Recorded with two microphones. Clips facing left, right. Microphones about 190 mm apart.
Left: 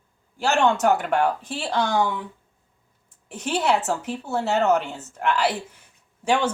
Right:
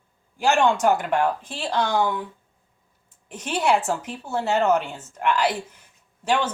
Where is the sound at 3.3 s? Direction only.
5° left (ahead or behind).